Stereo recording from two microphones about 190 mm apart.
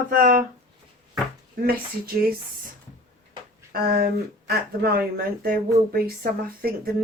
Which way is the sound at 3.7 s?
50° right (ahead or behind).